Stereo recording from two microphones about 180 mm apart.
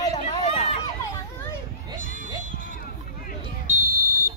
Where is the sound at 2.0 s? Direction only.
45° left (ahead or behind).